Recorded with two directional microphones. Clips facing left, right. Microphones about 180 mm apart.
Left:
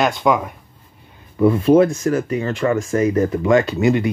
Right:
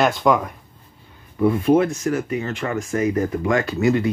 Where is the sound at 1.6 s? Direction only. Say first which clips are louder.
Left 5 dB; 30° left (ahead or behind).